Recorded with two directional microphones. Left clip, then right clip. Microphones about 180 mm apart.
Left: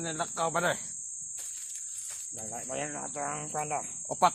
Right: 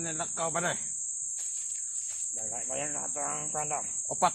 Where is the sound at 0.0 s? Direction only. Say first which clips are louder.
Left 2 dB; 15° left (ahead or behind).